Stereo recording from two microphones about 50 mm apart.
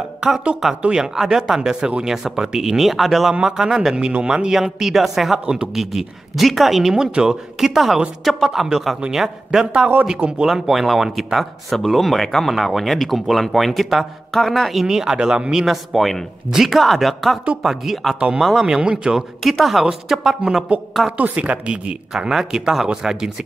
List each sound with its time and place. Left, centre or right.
0.2 s speech: centre
4.7 s speech: centre
5.4 s a woman's voice: centre
5.8 s speech: centre
10.1 s a woman's voice: right
10.4 s speech: centre
15.6 s speech: centre
19.1 s speech: centre
21.2 s a woman's voice: right
22.1 s speech: centre